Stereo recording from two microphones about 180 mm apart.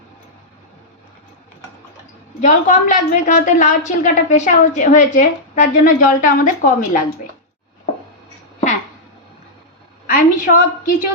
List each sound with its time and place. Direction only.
2.4 s a woman's voice: 45° left (ahead or behind)
10.1 s a woman's voice: 50° left (ahead or behind)